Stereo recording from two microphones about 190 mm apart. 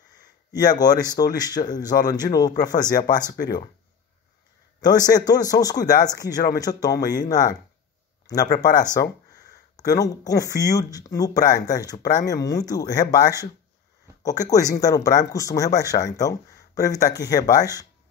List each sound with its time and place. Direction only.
0.5 s speech: 20° left (ahead or behind)
4.8 s speech: 20° left (ahead or behind)
8.9 s speech: 20° left (ahead or behind)